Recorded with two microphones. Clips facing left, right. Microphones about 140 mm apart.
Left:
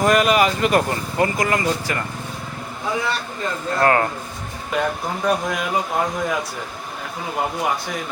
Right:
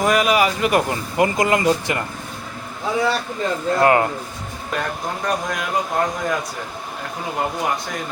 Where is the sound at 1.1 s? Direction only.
20° right (ahead or behind).